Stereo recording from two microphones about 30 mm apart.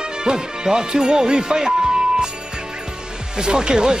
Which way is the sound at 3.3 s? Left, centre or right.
Right.